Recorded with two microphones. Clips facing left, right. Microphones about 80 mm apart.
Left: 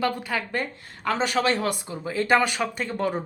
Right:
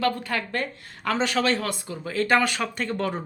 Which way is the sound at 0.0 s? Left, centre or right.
Centre.